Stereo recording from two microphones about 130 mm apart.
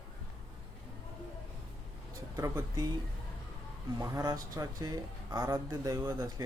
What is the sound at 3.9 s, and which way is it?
Speech, 25° right (ahead or behind).